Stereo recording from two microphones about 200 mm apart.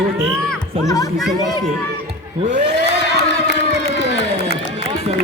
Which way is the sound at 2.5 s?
60° right (ahead or behind).